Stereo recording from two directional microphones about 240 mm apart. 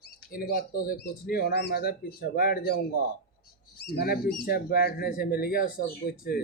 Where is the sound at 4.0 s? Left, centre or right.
Left.